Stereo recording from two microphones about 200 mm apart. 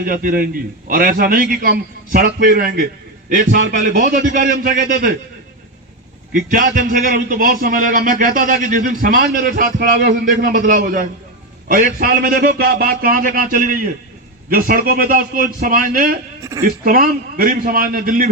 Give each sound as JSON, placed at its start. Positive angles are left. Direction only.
{"t": 0.0, "sound": "a man's voice", "side_deg": -45}
{"t": 6.3, "sound": "a man's voice", "side_deg": -40}
{"t": 16.4, "sound": "speech", "side_deg": -15}
{"t": 16.6, "sound": "a man's voice", "side_deg": -45}